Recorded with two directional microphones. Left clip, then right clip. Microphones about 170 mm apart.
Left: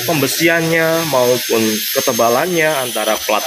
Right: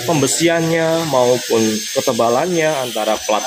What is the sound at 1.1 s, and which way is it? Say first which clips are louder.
Speech: right 2 dB; 5° left (ahead or behind).